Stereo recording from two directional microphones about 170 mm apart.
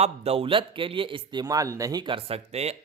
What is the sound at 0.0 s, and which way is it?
Speech, 35° right (ahead or behind).